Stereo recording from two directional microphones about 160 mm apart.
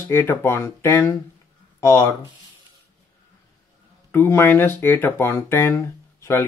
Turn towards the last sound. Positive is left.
turn(degrees=15)  # may be behind; listen again after turning